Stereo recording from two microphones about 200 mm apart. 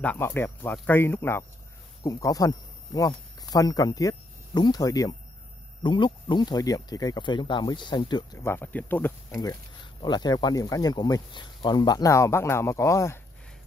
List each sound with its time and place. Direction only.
0.0 s speech: 10° left (ahead or behind)